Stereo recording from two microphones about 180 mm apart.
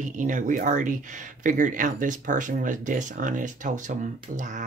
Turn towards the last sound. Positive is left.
turn(degrees=-45)  # may be behind; listen again after turning